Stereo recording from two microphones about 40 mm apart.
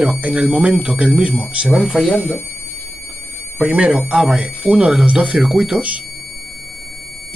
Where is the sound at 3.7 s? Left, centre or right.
Right.